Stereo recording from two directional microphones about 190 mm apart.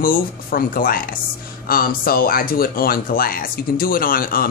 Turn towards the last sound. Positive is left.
turn(degrees=50)  # may be behind; listen again after turning